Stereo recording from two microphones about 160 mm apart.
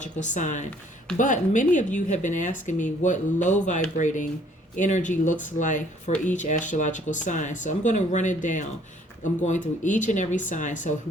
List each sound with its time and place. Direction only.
0.0 s speech: 50° left (ahead or behind)